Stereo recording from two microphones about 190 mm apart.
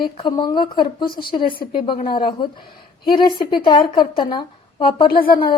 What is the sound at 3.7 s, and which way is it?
A woman's voice, 25° left (ahead or behind).